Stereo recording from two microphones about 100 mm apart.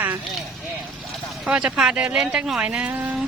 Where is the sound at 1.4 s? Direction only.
10° right (ahead or behind).